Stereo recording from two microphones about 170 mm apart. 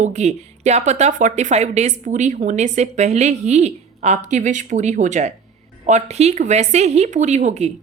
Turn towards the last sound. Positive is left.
turn(degrees=-40)  # may be behind; listen again after turning